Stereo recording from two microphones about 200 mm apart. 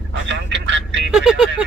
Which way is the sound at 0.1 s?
60° right (ahead or behind).